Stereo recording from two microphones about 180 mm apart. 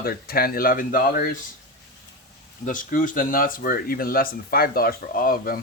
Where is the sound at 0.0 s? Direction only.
55° left (ahead or behind).